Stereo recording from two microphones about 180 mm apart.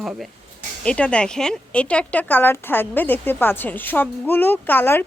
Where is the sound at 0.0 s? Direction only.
Centre (ahead or behind).